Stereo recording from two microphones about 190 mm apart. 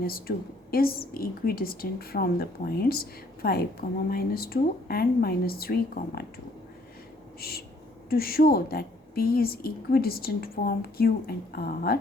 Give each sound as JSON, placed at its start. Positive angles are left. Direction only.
{"t": 0.0, "sound": "a woman's voice", "side_deg": 50}
{"t": 7.4, "sound": "a woman's voice", "side_deg": 55}